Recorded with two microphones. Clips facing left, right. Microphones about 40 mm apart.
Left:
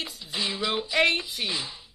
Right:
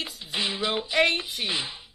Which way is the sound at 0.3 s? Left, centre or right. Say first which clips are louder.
Right 1 dB; right.